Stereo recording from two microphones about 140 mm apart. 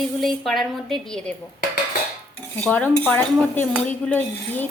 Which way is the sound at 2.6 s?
10° left (ahead or behind).